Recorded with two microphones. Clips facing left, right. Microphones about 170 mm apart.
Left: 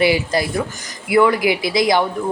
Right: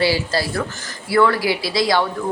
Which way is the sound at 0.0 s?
20° left (ahead or behind).